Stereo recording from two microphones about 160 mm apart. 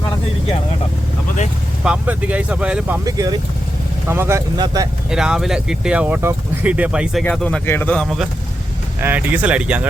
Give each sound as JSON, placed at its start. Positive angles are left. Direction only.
{"t": 1.8, "sound": "speech", "side_deg": -10}
{"t": 3.0, "sound": "speech", "side_deg": -20}
{"t": 5.0, "sound": "speech", "side_deg": -5}
{"t": 7.3, "sound": "speech", "side_deg": 5}
{"t": 8.0, "sound": "speech", "side_deg": 0}